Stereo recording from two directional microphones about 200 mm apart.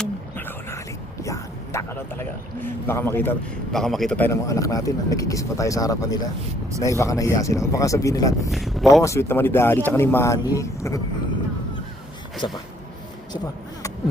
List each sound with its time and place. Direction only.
0.0 s a sound: 10° left (ahead or behind)
1.2 s speech: 15° left (ahead or behind)
4.3 s speech: 15° left (ahead or behind)
8.5 s speech: centre (ahead or behind)
9.0 s speech: 15° left (ahead or behind)
12.4 s speech: 25° left (ahead or behind)